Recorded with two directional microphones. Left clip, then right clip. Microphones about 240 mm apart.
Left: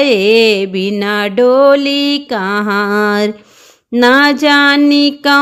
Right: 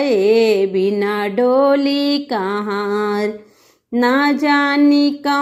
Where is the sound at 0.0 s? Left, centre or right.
Left.